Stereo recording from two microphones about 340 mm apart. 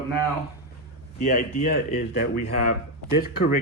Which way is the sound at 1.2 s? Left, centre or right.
Left.